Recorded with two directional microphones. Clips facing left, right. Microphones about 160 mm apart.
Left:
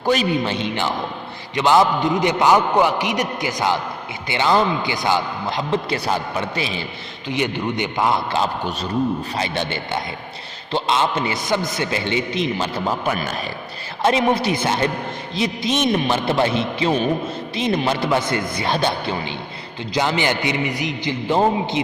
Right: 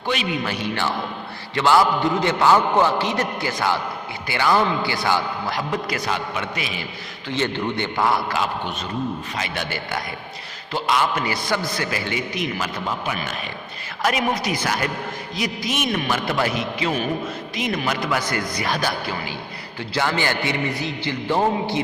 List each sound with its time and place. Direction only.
0.0 s a man's voice: 40° left (ahead or behind)
0.4 s a man's voice: 25° left (ahead or behind)
7.3 s a man's voice: 15° left (ahead or behind); by 13.3 s 40° left (ahead or behind)
14.0 s a man's voice: 25° left (ahead or behind)